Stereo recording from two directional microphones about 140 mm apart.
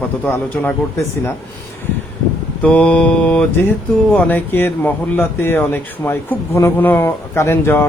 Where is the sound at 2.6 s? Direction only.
10° left (ahead or behind).